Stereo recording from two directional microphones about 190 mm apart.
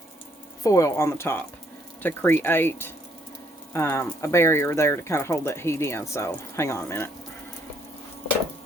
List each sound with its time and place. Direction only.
0.6 s speech: 15° left (ahead or behind)